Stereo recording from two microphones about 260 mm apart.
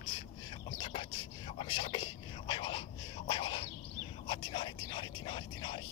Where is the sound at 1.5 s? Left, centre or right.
Centre.